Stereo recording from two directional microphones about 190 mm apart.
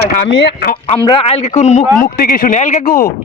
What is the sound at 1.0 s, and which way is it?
Speech, 30° left (ahead or behind).